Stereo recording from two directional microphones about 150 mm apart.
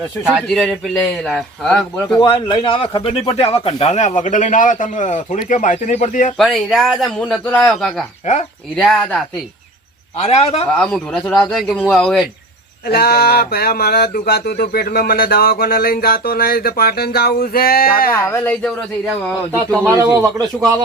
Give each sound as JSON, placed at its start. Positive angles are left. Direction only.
{"t": 0.3, "sound": "speech", "side_deg": 0}
{"t": 2.1, "sound": "speech", "side_deg": 30}
{"t": 6.3, "sound": "speech", "side_deg": 0}
{"t": 10.2, "sound": "a man's voice", "side_deg": 45}
{"t": 10.7, "sound": "speech", "side_deg": 5}
{"t": 12.9, "sound": "speech", "side_deg": 90}
{"t": 18.1, "sound": "speech", "side_deg": 15}
{"t": 19.8, "sound": "speech", "side_deg": -15}